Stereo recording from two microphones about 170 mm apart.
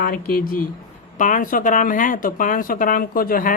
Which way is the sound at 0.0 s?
60° left (ahead or behind).